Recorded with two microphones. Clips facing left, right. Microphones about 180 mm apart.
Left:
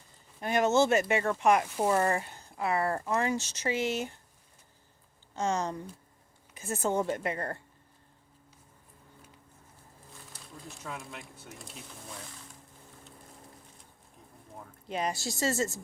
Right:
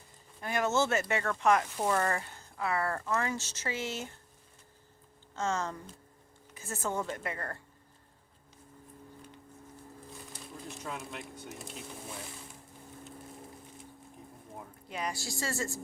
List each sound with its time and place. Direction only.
0.4 s speech: 20° left (ahead or behind)
1.9 s speech: 25° left (ahead or behind)
5.3 s a woman's voice: 15° left (ahead or behind)
10.8 s speech: centre (ahead or behind)
14.8 s a woman's voice: 25° left (ahead or behind)